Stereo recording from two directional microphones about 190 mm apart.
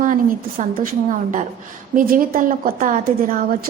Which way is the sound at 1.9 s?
50° right (ahead or behind).